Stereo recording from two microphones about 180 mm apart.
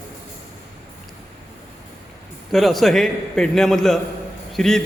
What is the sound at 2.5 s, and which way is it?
A man's voice, centre (ahead or behind).